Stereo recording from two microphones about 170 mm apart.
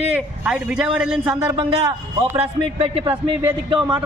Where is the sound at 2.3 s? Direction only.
35° right (ahead or behind).